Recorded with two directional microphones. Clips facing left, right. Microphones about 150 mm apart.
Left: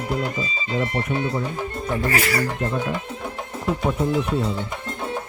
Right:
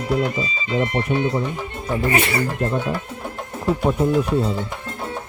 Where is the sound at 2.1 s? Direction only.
25° right (ahead or behind).